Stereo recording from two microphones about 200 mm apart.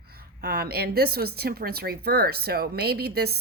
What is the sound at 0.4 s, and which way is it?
A woman's voice, 50° right (ahead or behind).